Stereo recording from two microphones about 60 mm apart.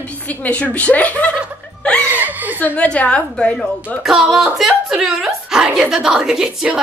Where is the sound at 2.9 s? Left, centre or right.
Centre.